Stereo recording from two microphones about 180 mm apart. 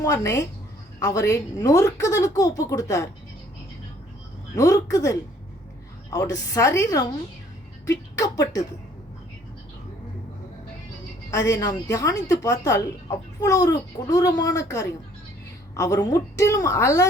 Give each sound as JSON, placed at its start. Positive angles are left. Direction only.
{"t": 0.0, "sound": "a woman's voice", "side_deg": 15}
{"t": 4.5, "sound": "a woman's voice", "side_deg": 20}
{"t": 11.3, "sound": "a woman's voice", "side_deg": 15}